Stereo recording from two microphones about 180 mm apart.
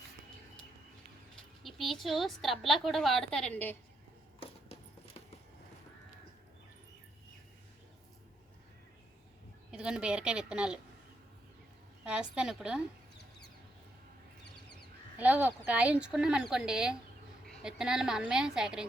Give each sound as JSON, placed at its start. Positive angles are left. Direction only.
{"t": 1.6, "sound": "a woman's voice", "side_deg": 0}
{"t": 4.4, "sound": "a sound", "side_deg": 35}
{"t": 9.7, "sound": "a woman's voice", "side_deg": -5}
{"t": 12.0, "sound": "a woman's voice", "side_deg": -5}
{"t": 15.2, "sound": "a woman's voice", "side_deg": -10}